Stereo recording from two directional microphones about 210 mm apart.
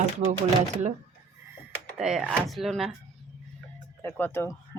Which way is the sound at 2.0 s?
5° right (ahead or behind).